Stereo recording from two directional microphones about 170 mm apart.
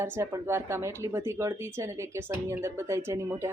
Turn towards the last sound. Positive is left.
turn(degrees=-15)  # may be behind; listen again after turning